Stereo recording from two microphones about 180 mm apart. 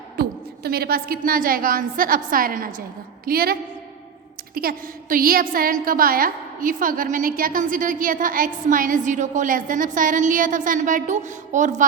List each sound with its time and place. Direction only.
0.2 s a woman's voice: 60° right (ahead or behind)